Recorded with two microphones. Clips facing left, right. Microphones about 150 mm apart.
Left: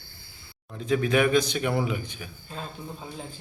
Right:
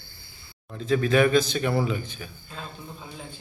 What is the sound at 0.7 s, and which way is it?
Speech, 15° left (ahead or behind).